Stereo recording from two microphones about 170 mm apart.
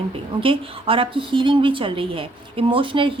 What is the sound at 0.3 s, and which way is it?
A woman's voice, 30° right (ahead or behind).